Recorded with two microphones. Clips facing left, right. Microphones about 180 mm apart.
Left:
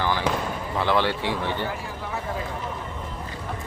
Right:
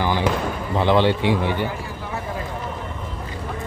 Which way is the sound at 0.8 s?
20° right (ahead or behind).